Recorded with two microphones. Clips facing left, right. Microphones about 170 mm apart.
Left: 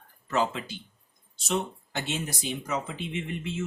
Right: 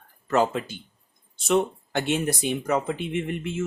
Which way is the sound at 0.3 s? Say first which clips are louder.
Right 5 dB; 50° right (ahead or behind).